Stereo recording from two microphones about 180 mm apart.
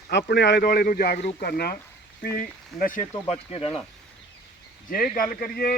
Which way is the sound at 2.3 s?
50° left (ahead or behind).